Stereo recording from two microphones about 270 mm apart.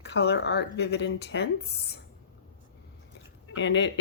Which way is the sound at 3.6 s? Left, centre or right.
Left.